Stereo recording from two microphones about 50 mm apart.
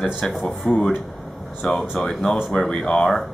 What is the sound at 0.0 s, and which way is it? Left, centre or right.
Speech, centre.